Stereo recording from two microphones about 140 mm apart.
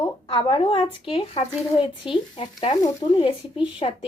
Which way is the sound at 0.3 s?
35° left (ahead or behind).